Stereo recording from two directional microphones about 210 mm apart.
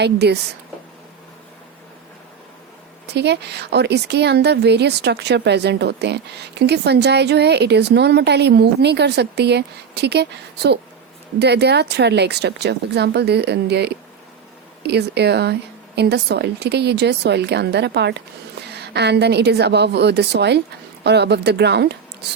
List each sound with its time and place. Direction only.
0.0 s a woman's voice: 50° right (ahead or behind)
3.1 s a woman's voice: 55° right (ahead or behind)